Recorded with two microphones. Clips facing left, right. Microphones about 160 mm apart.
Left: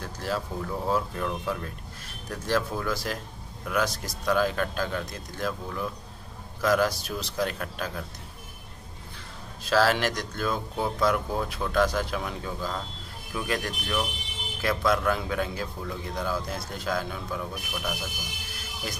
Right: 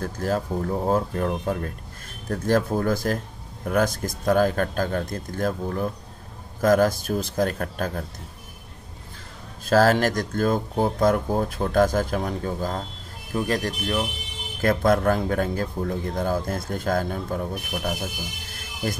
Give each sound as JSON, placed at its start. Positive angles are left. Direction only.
{"t": 0.0, "sound": "a man's voice", "side_deg": -45}
{"t": 9.7, "sound": "a man's voice", "side_deg": -45}
{"t": 14.6, "sound": "a man's voice", "side_deg": -50}